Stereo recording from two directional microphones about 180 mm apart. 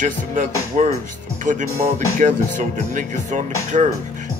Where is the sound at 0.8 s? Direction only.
40° right (ahead or behind).